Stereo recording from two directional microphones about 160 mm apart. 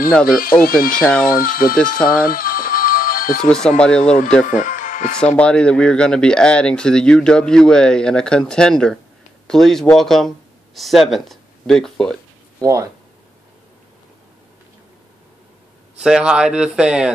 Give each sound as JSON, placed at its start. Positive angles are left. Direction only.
{"t": 0.4, "sound": "speech", "side_deg": 65}
{"t": 0.9, "sound": "speech", "side_deg": 5}
{"t": 1.2, "sound": "speech", "side_deg": 65}
{"t": 2.0, "sound": "music", "side_deg": 65}
{"t": 3.4, "sound": "speech", "side_deg": 5}
{"t": 4.5, "sound": "music", "side_deg": 55}
{"t": 5.2, "sound": "speech", "side_deg": 5}
{"t": 12.5, "sound": "speech", "side_deg": -20}
{"t": 16.0, "sound": "speech", "side_deg": -5}